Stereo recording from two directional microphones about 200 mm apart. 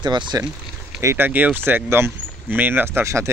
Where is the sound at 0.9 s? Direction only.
10° right (ahead or behind).